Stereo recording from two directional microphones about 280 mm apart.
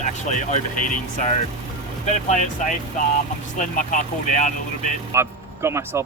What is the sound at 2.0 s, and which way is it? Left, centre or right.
Speech, left.